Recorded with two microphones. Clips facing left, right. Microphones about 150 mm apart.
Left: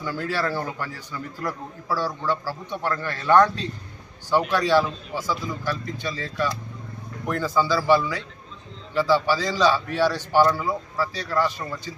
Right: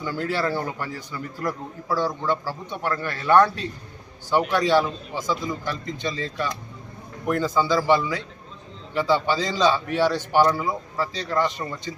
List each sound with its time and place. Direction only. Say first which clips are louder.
0.0 s a man's voice: right 1 dB; 15° right (ahead or behind)